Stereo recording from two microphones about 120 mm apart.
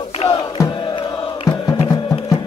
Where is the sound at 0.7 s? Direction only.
40° left (ahead or behind).